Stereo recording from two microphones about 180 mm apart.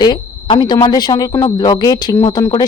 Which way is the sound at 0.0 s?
25° left (ahead or behind).